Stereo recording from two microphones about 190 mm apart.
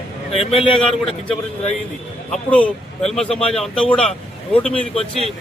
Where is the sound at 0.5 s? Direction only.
30° left (ahead or behind).